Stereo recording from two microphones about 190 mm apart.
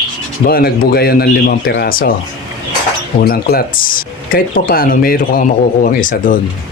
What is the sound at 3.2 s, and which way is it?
Speech, 55° left (ahead or behind).